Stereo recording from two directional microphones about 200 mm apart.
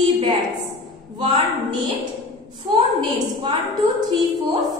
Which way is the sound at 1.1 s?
25° right (ahead or behind).